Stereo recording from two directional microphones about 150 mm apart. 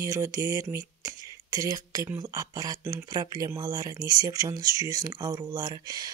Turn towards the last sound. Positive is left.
turn(degrees=-25)  # may be behind; listen again after turning